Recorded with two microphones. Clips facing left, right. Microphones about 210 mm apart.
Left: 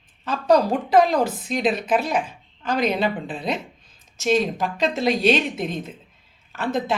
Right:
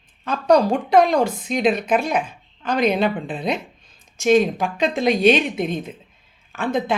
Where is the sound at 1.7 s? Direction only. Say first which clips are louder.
Right 2 dB; 50° right (ahead or behind).